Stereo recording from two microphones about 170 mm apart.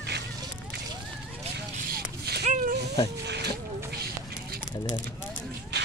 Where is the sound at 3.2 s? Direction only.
75° right (ahead or behind).